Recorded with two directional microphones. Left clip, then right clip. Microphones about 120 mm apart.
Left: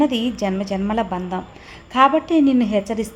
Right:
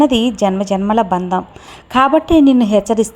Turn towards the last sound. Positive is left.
turn(degrees=-40)  # may be behind; listen again after turning